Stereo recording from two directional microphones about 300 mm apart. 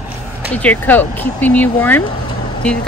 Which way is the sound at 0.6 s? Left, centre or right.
Centre.